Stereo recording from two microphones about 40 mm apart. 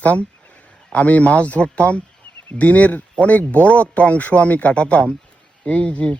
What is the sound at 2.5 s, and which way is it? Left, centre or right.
Speech, left.